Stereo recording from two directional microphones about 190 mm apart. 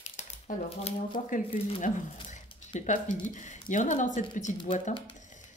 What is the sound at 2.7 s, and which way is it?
Speech, 40° left (ahead or behind).